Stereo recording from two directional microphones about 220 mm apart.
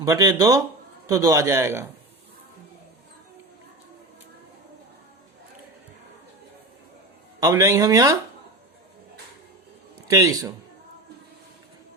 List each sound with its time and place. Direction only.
0.0 s speech: 15° right (ahead or behind)
7.3 s speech: 15° right (ahead or behind)
10.1 s speech: 15° right (ahead or behind)